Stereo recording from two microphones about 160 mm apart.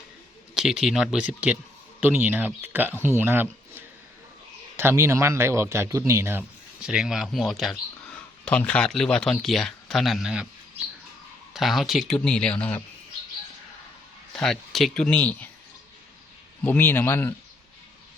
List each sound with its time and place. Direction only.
0.5 s speech: 5° right (ahead or behind)
6.8 s speech: 5° right (ahead or behind)
11.5 s speech: centre (ahead or behind)
14.3 s speech: 5° left (ahead or behind)
16.6 s a man's voice: 15° left (ahead or behind)